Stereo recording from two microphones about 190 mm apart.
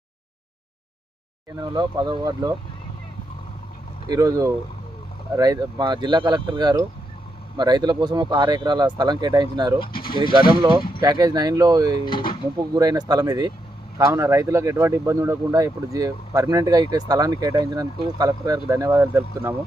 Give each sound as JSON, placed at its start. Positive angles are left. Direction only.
{"t": 1.5, "sound": "speech", "side_deg": -20}
{"t": 4.1, "sound": "speech", "side_deg": -20}
{"t": 11.0, "sound": "speech", "side_deg": -20}
{"t": 11.9, "sound": "speech", "side_deg": 25}
{"t": 12.5, "sound": "speech", "side_deg": -20}